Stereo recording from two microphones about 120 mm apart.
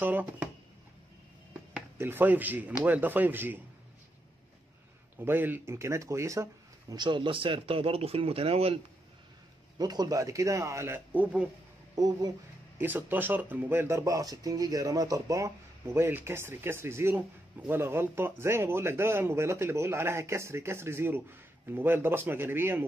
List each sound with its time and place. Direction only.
0.0 s speech: 15° right (ahead or behind)
2.0 s speech: 15° right (ahead or behind)
5.1 s speech: 15° right (ahead or behind)
7.0 s speech: 45° right (ahead or behind)
9.8 s speech: 35° right (ahead or behind)
11.1 s speech: 10° right (ahead or behind)
11.9 s speech: 35° right (ahead or behind)
12.7 s speech: 15° right (ahead or behind)